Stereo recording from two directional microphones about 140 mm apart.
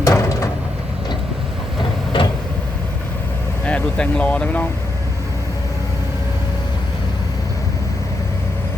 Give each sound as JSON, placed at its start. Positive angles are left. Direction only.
{"t": 0.0, "sound": "a sound", "side_deg": 25}
{"t": 2.1, "sound": "vehicle", "side_deg": 35}
{"t": 3.7, "sound": "speech", "side_deg": 10}